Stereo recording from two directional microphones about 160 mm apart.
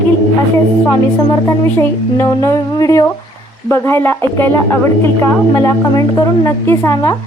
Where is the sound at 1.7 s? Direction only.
15° left (ahead or behind).